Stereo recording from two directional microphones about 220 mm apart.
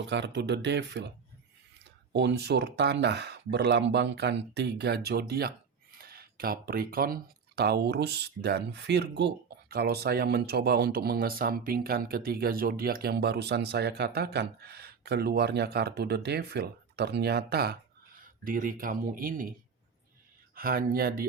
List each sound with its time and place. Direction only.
0.1 s speech: 55° right (ahead or behind)
2.1 s speech: 50° right (ahead or behind)
20.6 s speech: 40° right (ahead or behind)